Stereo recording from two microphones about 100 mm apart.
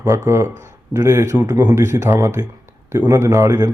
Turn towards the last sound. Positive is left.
turn(degrees=-35)  # may be behind; listen again after turning